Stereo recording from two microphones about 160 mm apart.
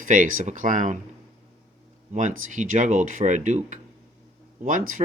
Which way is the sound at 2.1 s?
50° right (ahead or behind).